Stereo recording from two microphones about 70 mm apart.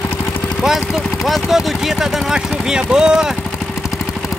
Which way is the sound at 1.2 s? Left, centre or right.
Centre.